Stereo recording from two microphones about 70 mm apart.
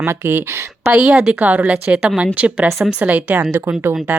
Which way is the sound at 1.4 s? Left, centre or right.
Right.